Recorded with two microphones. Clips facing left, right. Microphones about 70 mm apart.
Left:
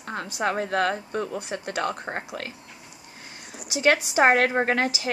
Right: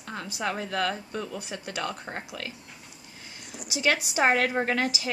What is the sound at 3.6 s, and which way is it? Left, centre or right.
A woman's voice, left.